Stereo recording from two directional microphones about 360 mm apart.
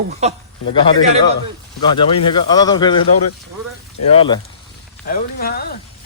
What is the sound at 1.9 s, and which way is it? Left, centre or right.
Speech, centre.